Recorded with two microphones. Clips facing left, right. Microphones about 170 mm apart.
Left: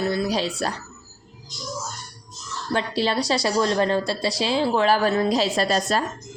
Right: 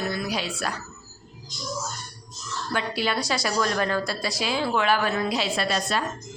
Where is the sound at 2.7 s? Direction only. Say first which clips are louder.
Left 4 dB; 30° left (ahead or behind).